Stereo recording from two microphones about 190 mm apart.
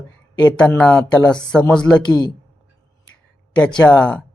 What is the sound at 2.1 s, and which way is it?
Speech, 20° left (ahead or behind).